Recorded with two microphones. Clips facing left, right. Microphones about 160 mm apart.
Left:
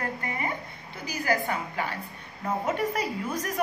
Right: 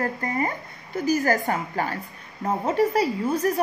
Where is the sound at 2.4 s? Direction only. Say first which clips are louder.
Right 6 dB; 35° right (ahead or behind).